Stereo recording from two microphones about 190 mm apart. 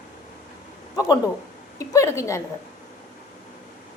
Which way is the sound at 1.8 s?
15° left (ahead or behind).